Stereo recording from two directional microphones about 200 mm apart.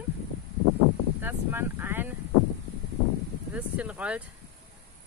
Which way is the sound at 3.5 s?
5° right (ahead or behind).